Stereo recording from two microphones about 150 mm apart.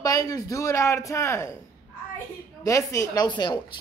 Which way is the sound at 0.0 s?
25° left (ahead or behind).